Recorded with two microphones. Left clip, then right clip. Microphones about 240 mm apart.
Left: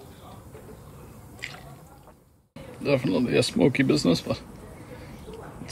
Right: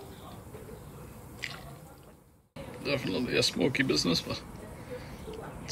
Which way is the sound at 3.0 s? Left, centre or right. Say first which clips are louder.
Left 7 dB; centre.